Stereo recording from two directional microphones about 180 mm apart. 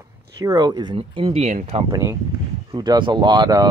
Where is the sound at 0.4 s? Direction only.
20° right (ahead or behind); by 1.9 s 40° right (ahead or behind).